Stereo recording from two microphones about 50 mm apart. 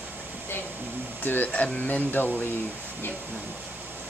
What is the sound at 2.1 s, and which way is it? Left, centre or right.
Speech, left.